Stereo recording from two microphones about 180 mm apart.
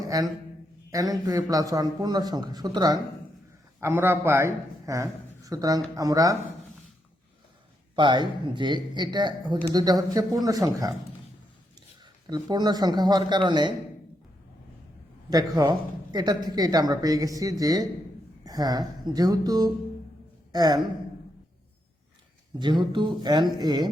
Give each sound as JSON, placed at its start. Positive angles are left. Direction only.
{"t": 0.1, "sound": "a man's voice", "side_deg": -20}
{"t": 7.9, "sound": "speech", "side_deg": -25}
{"t": 12.3, "sound": "speech", "side_deg": -25}
{"t": 15.3, "sound": "speech", "side_deg": -20}
{"t": 22.5, "sound": "speech", "side_deg": -25}